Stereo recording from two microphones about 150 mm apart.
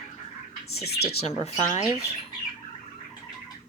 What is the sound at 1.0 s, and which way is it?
Speech, 45° left (ahead or behind).